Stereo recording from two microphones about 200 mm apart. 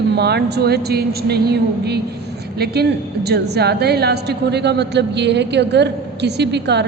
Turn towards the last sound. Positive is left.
turn(degrees=-55)  # may be behind; listen again after turning